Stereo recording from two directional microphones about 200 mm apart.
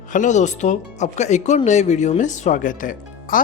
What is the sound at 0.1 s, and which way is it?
Speech, 40° left (ahead or behind).